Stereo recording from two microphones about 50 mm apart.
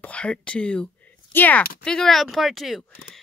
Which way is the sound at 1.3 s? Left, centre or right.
Left.